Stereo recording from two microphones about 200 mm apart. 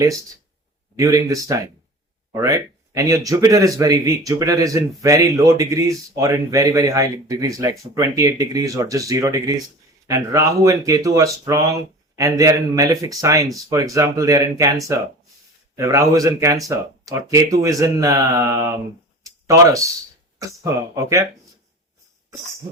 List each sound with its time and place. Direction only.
0.9 s speech: 15° right (ahead or behind)
19.2 s a sound: 15° right (ahead or behind)
20.4 s speech: 15° right (ahead or behind)